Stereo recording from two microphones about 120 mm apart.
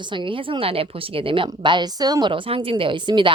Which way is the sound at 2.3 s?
50° right (ahead or behind).